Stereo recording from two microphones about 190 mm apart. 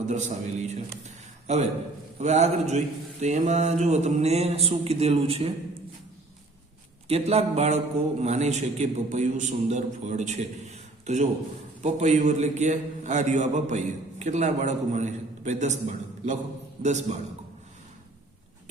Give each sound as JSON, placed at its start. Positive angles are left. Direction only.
{"t": 0.1, "sound": "a man's voice", "side_deg": -40}
{"t": 7.1, "sound": "a man's voice", "side_deg": -35}